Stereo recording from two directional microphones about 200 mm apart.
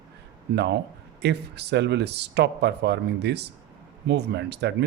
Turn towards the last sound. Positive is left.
turn(degrees=-60)  # may be behind; listen again after turning